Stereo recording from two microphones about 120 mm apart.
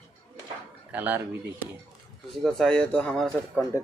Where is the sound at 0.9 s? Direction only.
15° right (ahead or behind).